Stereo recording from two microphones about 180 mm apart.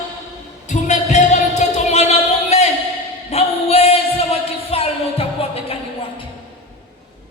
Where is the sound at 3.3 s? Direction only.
35° left (ahead or behind).